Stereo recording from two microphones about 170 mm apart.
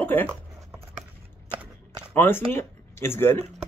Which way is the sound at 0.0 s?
10° left (ahead or behind).